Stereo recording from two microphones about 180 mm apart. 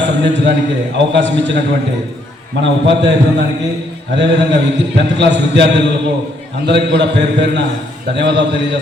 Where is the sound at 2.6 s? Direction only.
80° right.